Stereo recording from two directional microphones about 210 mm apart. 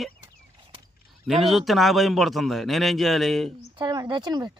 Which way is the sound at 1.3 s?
Centre (ahead or behind).